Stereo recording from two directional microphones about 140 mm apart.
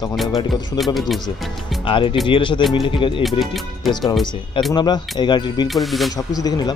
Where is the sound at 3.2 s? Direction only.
Centre (ahead or behind).